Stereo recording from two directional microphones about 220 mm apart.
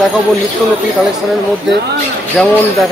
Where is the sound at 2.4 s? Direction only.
Centre (ahead or behind).